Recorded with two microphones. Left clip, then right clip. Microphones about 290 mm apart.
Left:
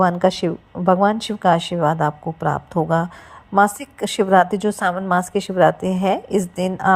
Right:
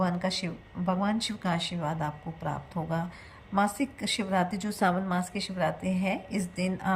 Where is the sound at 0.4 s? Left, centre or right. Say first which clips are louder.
Left 15 dB; left.